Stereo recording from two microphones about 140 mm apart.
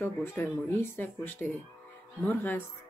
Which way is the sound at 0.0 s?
15° left (ahead or behind).